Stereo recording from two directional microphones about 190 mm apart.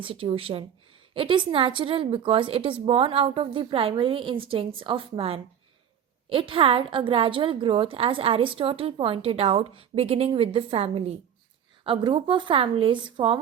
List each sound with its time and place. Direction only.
0.0 s a woman's voice: 30° right (ahead or behind)